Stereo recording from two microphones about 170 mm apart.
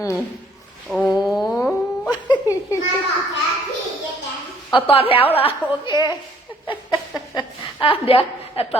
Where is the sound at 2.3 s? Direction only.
20° left (ahead or behind).